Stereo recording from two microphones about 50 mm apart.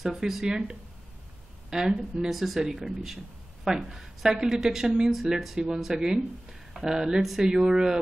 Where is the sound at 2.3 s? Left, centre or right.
Centre.